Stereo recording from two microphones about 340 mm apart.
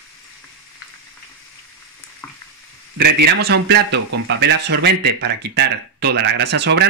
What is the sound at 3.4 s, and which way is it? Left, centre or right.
A man's voice, right.